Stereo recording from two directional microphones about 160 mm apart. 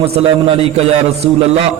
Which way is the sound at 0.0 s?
35° right (ahead or behind).